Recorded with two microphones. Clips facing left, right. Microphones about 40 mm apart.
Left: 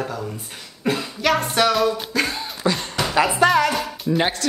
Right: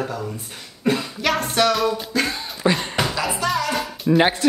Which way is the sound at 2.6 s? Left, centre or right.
Centre.